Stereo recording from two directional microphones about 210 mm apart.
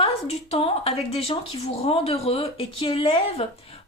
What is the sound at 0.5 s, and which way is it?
A woman's voice, 30° left (ahead or behind).